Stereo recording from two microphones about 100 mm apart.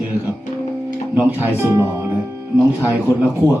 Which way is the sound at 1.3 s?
20° right (ahead or behind).